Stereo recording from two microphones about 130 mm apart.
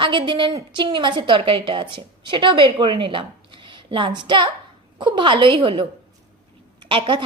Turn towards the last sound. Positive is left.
turn(degrees=-40)  # may be behind; listen again after turning